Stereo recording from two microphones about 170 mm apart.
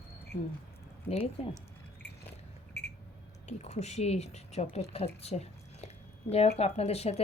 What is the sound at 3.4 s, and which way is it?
Speech, 40° left (ahead or behind).